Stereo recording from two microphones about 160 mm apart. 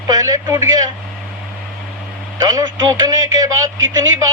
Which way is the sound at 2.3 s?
25° right (ahead or behind).